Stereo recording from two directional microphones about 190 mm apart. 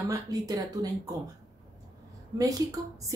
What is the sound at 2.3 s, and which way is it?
Speech, 20° right (ahead or behind).